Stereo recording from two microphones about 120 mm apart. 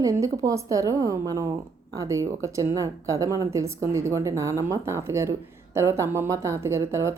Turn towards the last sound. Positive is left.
turn(degrees=-25)  # may be behind; listen again after turning